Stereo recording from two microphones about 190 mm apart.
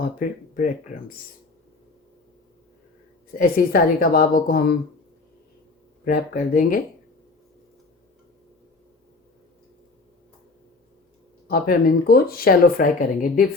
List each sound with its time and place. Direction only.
0.2 s speech: 50° left (ahead or behind)
3.3 s speech: 50° left (ahead or behind)
6.1 s speech: 45° left (ahead or behind)
11.4 s speech: 50° left (ahead or behind)